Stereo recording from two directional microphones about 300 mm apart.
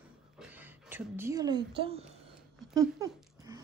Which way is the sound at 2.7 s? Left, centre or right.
Centre.